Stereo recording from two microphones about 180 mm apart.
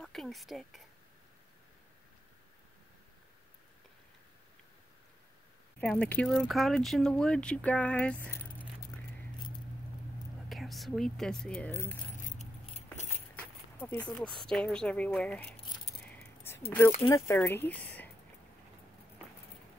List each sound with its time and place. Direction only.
0.0 s speech: centre (ahead or behind)
5.8 s speech: 5° left (ahead or behind)
10.5 s speech: centre (ahead or behind)
12.7 s keys jangling: 40° left (ahead or behind)
13.4 s speech: 10° left (ahead or behind)